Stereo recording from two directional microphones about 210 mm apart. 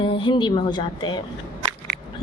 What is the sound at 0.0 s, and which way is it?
A woman's voice, 25° left (ahead or behind).